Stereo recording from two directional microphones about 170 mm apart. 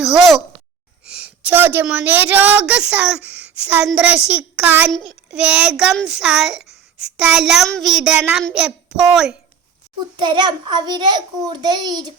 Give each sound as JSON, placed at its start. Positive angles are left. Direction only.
{"t": 0.0, "sound": "a sound", "side_deg": 0}
{"t": 1.0, "sound": "a woman's voice", "side_deg": -5}
{"t": 10.2, "sound": "a child's voice", "side_deg": -25}